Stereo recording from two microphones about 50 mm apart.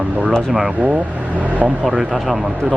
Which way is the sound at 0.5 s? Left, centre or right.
Right.